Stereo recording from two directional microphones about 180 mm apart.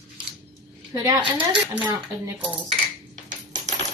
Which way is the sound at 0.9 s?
20° right (ahead or behind).